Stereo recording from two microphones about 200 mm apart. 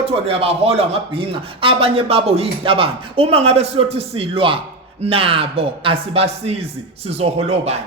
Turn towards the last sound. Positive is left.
turn(degrees=-30)  # may be behind; listen again after turning